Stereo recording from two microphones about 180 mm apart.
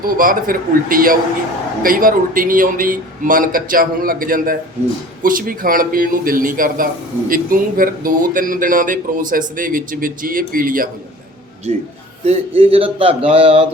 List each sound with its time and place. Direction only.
0.0 s a man's voice: 50° right (ahead or behind)
12.2 s speech: 35° right (ahead or behind)